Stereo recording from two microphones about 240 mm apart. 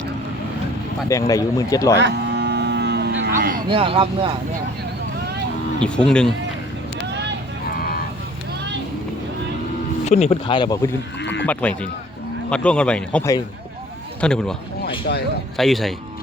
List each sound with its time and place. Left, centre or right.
1.3 s speech: centre
2.0 s cattle: right
3.3 s a sound: right
3.7 s speech: right
5.8 s speech: centre
10.1 s speech: left
11.2 s a sound: left
12.5 s speech: centre
15.5 s speech: centre